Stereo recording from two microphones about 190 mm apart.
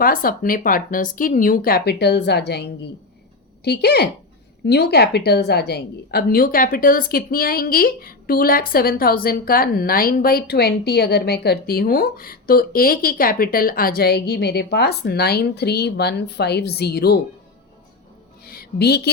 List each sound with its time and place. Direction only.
0.0 s a woman's voice: 50° left (ahead or behind)
18.4 s music: 55° left (ahead or behind)